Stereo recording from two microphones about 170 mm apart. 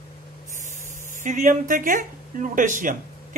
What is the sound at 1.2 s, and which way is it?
Speech, 50° right (ahead or behind).